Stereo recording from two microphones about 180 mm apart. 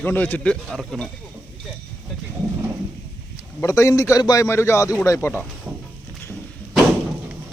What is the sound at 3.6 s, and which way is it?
A man's voice, 15° left (ahead or behind).